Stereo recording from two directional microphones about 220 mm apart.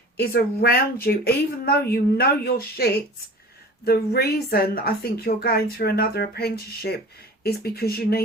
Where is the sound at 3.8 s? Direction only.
45° left (ahead or behind).